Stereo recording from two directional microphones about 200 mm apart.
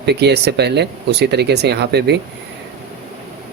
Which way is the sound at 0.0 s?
55° right (ahead or behind).